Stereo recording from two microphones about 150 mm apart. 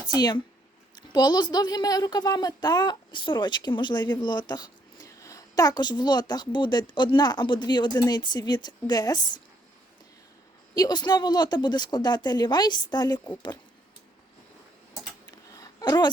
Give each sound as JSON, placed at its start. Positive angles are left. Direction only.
{"t": 0.1, "sound": "speech", "side_deg": 25}
{"t": 10.8, "sound": "speech", "side_deg": 30}
{"t": 15.4, "sound": "a sound", "side_deg": 25}